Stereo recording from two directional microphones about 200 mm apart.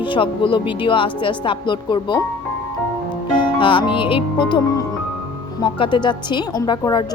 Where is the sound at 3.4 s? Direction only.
25° left (ahead or behind).